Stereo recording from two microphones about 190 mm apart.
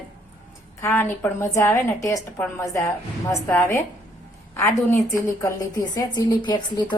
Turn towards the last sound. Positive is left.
turn(degrees=25)  # may be behind; listen again after turning